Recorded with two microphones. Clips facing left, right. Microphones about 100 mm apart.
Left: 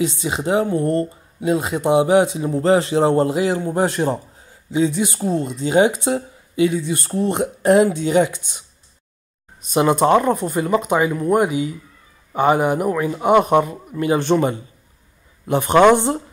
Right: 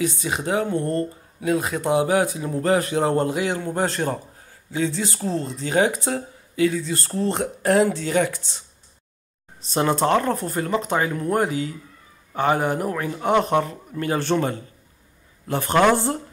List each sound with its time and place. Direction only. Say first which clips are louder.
0.0 s speech: left 3 dB; 20° left (ahead or behind)
9.7 s a man's voice: left 5 dB; 10° left (ahead or behind)